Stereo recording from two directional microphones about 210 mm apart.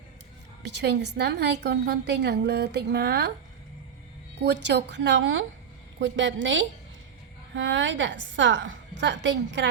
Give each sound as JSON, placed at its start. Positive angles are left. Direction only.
{"t": 0.6, "sound": "a woman's voice", "side_deg": -55}
{"t": 4.4, "sound": "a woman's voice", "side_deg": -55}